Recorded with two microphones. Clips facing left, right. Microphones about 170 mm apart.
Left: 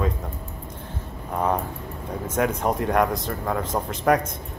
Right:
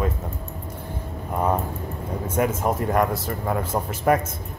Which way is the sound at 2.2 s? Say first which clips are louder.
Even; 5° right (ahead or behind).